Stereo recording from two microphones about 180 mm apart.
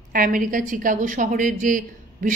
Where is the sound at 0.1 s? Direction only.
50° right (ahead or behind).